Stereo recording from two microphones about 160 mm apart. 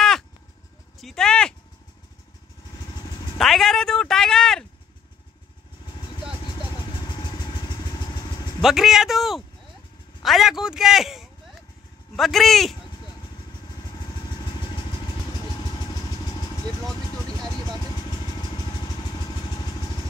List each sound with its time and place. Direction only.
1.0 s speech: 5° left (ahead or behind)
3.3 s speech: centre (ahead or behind)
7.1 s vehicle: 25° left (ahead or behind)
8.5 s speech: centre (ahead or behind)
15.6 s vehicle: 25° left (ahead or behind)
17.7 s vehicle: 25° left (ahead or behind)